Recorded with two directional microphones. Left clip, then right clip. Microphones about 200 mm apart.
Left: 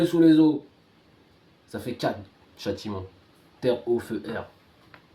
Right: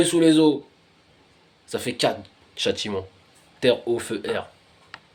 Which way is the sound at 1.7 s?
30° right (ahead or behind).